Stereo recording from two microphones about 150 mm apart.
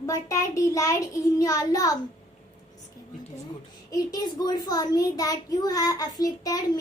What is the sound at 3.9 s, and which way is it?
A child's voice, 25° left (ahead or behind).